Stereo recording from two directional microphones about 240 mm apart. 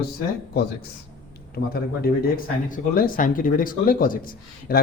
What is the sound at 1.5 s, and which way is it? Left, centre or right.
Speech, left.